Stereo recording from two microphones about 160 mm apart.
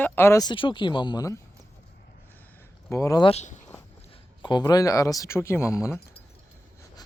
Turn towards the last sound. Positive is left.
turn(degrees=20)  # may be behind; listen again after turning